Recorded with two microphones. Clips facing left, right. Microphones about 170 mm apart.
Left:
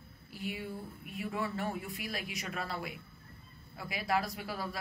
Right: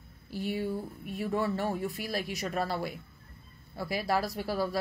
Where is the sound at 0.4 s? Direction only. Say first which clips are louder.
Right 8 dB; 35° right (ahead or behind).